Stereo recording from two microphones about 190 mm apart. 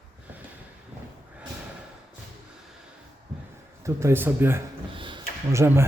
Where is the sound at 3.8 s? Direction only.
15° right (ahead or behind).